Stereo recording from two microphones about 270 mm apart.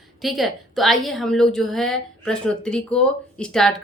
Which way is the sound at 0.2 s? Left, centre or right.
Centre.